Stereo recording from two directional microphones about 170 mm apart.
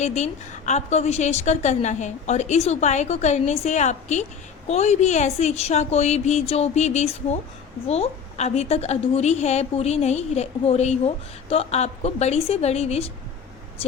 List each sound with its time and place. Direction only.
0.0 s a woman's voice: 45° left (ahead or behind)